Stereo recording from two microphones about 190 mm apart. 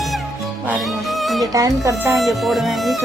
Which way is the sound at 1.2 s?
Centre (ahead or behind).